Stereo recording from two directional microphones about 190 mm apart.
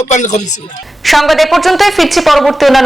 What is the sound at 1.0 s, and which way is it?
A woman's voice, centre (ahead or behind).